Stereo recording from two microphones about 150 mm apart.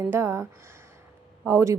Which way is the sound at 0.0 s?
15° right (ahead or behind).